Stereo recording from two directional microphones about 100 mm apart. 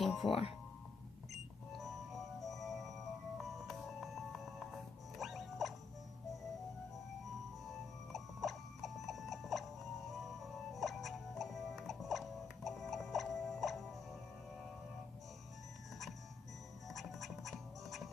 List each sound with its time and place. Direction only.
0.0 s music: centre (ahead or behind)
0.3 s speech: 75° left (ahead or behind)
1.7 s music: centre (ahead or behind)
8.1 s clock: centre (ahead or behind)
16.9 s music: centre (ahead or behind)